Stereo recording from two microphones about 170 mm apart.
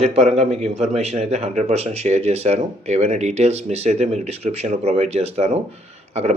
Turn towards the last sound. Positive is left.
turn(degrees=-40)  # may be behind; listen again after turning